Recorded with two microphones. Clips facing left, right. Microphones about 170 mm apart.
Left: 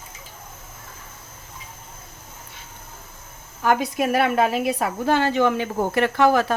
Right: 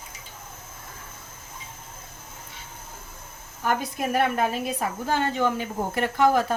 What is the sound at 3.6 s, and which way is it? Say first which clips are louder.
A woman's voice: left 6 dB; 80° left.